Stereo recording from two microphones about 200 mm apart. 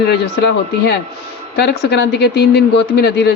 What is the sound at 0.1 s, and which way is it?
A man's voice, 55° left (ahead or behind).